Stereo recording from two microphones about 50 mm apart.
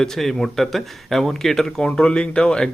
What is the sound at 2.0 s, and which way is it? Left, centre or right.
Speech, centre.